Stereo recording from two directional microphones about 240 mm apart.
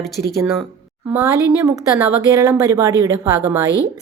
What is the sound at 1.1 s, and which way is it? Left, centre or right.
Speech, centre.